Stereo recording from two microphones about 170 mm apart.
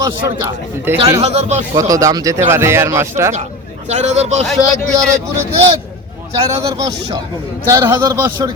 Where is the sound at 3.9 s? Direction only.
40° right (ahead or behind).